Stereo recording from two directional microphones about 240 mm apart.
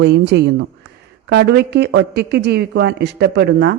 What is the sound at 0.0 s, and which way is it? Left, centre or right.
Speech, right.